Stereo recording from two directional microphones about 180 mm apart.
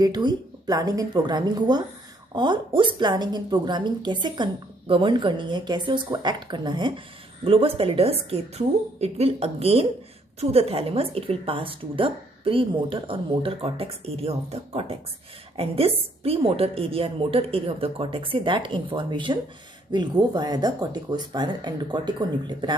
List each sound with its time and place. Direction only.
0.0 s a woman's voice: 20° right (ahead or behind)